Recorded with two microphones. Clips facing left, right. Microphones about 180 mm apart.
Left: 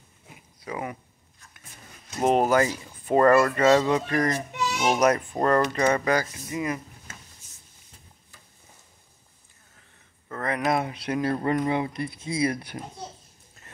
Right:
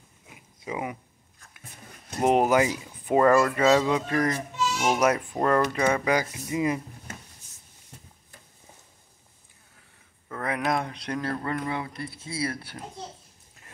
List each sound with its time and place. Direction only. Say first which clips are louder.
0.7 s speech: right 1 dB; 10° right (ahead or behind)
2.2 s speech: even; 15° right (ahead or behind)
3.3 s speech: left 2 dB; centre (ahead or behind)
6.3 s speech: right 3 dB; 20° right (ahead or behind)
10.2 s speech: left 2 dB; 5° right (ahead or behind)
11.3 s speech: left 5 dB; 20° left (ahead or behind)